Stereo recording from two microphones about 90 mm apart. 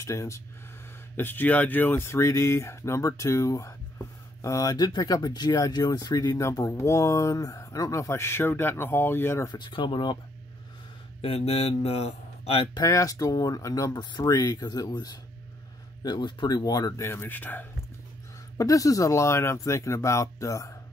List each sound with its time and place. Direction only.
0.0 s speech: 35° left (ahead or behind)
1.1 s speech: 20° left (ahead or behind)
9.5 s speech: 60° left (ahead or behind)
12.8 s speech: 35° left (ahead or behind)
17.0 s speech: 25° left (ahead or behind)
18.6 s speech: 40° left (ahead or behind)